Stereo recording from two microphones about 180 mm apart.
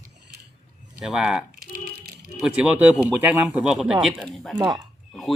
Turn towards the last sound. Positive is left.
turn(degrees=0)  # may be behind; listen again after turning